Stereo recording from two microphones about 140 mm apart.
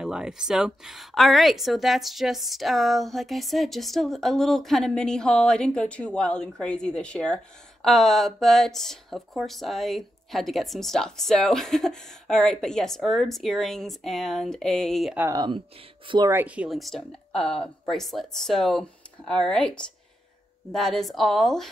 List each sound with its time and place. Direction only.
0.0 s speech: 5° right (ahead or behind)
15.3 s speech: 30° right (ahead or behind)
16.3 s speech: 15° right (ahead or behind)